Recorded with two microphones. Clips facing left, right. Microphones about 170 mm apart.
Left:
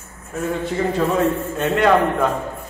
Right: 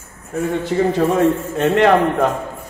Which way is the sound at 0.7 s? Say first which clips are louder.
Right 4 dB; 70° right (ahead or behind).